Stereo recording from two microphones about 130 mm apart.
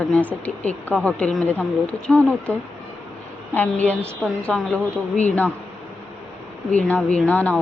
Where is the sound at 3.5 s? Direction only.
10° left (ahead or behind).